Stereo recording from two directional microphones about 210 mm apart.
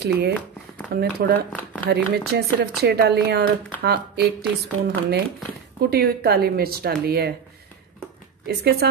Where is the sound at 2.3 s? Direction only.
55° right (ahead or behind).